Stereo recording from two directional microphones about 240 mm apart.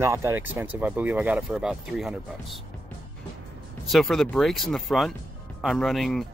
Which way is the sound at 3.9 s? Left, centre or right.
Centre.